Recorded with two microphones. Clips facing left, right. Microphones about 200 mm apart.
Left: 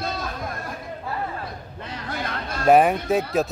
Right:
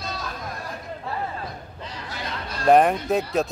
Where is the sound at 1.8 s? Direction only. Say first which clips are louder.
Left 5 dB; 55° left (ahead or behind).